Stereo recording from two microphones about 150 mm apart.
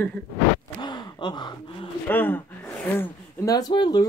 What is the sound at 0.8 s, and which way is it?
Gasp, 30° left (ahead or behind).